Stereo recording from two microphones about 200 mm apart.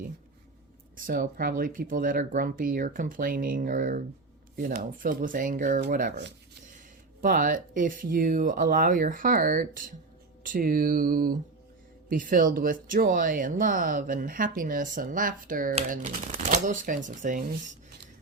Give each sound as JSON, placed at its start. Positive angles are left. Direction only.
{"t": 0.9, "sound": "speech", "side_deg": -45}
{"t": 7.2, "sound": "speech", "side_deg": -40}